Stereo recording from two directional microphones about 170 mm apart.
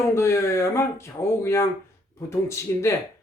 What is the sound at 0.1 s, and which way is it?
Speech, 15° left (ahead or behind).